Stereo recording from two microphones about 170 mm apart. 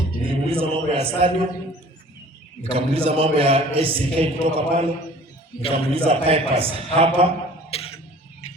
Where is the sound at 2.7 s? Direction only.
35° right (ahead or behind).